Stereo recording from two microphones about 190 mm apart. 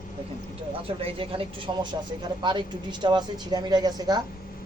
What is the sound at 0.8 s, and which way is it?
Speech, 30° right (ahead or behind).